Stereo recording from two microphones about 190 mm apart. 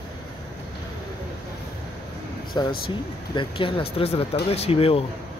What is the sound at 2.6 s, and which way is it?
Speech, 20° left (ahead or behind).